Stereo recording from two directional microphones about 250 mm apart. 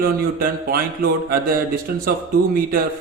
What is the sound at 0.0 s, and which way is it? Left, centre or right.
Speech, right.